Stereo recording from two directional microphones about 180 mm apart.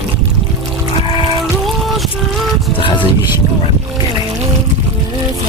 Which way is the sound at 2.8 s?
30° left (ahead or behind).